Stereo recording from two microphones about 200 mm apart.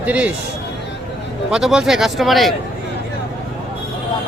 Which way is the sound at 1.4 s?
5° right (ahead or behind).